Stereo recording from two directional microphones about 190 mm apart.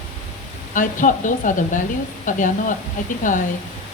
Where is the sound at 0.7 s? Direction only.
45° left (ahead or behind).